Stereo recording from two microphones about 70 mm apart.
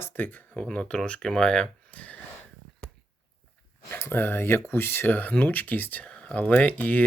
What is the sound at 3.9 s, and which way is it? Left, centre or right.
Speech, left.